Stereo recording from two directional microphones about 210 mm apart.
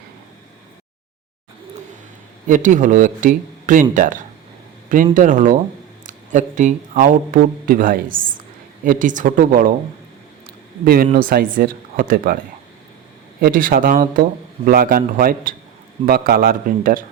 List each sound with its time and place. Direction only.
2.5 s speech: 40° right (ahead or behind)
10.8 s speech: 45° right (ahead or behind)
13.4 s speech: 40° right (ahead or behind)